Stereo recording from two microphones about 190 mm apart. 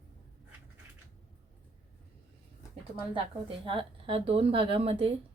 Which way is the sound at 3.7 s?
30° right (ahead or behind).